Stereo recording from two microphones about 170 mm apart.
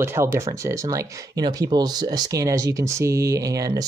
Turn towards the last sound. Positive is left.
turn(degrees=-20)  # may be behind; listen again after turning